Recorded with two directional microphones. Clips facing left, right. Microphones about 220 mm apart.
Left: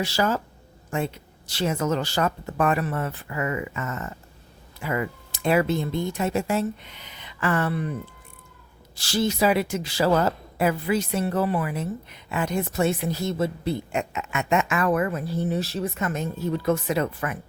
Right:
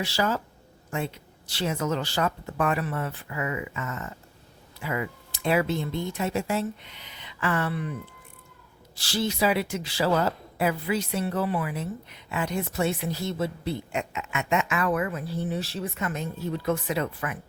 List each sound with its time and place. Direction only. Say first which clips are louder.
0.0 s a woman's voice: left 3 dB; 45° left (ahead or behind)
9.0 s a woman's voice: left 3 dB; 45° left (ahead or behind)